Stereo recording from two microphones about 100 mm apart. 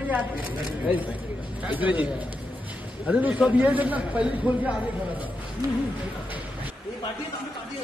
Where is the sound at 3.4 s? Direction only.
15° right (ahead or behind).